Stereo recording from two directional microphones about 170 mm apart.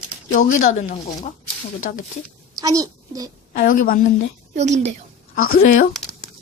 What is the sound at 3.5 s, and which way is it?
Speech, 55° left (ahead or behind).